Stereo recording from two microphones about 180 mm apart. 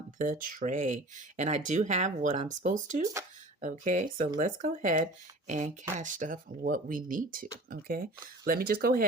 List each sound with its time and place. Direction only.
0.2 s speech: 50° right (ahead or behind)